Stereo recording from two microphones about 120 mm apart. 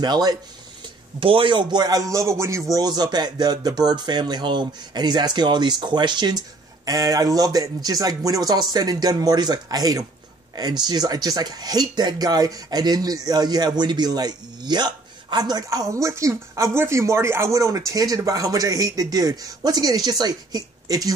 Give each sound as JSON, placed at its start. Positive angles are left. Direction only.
{"t": 0.0, "sound": "speech", "side_deg": -35}
{"t": 1.2, "sound": "speech", "side_deg": -45}